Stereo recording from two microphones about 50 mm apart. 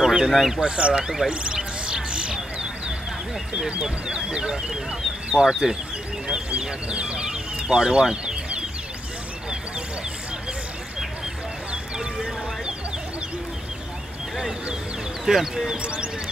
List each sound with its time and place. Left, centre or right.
0.0 s speech: centre
0.6 s speech: right
1.3 s a sound: right
3.8 s speech: centre
11.7 s music: centre
15.2 s speech: centre
15.8 s speech: right